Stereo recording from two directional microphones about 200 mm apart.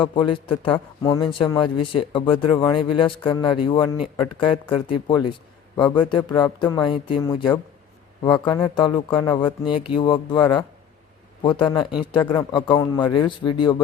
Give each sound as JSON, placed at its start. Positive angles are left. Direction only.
{"t": 0.0, "sound": "a man's voice", "side_deg": 25}